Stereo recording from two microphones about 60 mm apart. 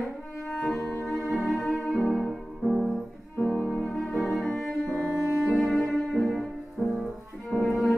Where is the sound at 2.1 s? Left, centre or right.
Centre.